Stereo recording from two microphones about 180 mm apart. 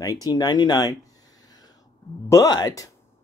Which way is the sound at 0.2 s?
20° left (ahead or behind).